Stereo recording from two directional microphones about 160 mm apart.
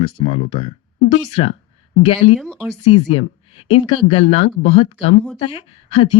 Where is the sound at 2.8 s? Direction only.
40° left (ahead or behind).